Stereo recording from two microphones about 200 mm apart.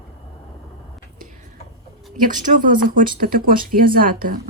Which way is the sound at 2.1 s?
45° right (ahead or behind).